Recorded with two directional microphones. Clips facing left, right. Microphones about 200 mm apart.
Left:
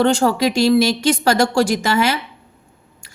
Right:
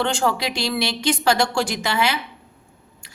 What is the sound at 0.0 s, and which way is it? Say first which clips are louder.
A woman's voice: left 7 dB; 40° left (ahead or behind).